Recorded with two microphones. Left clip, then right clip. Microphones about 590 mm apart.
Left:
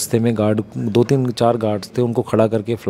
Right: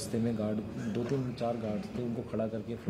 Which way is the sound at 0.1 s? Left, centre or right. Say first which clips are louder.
Left 17 dB; left.